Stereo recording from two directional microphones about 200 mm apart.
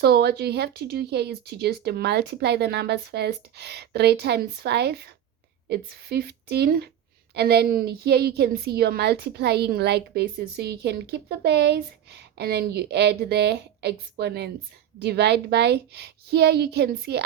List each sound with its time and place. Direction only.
0.0 s a woman's voice: 55° right (ahead or behind)